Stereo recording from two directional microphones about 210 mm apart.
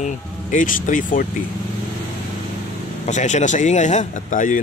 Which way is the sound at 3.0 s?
35° left (ahead or behind).